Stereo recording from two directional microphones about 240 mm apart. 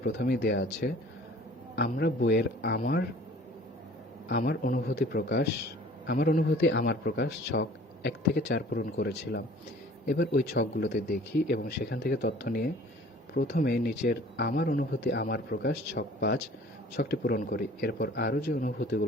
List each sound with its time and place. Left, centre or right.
0.0 s a man's voice: left
4.3 s a man's voice: left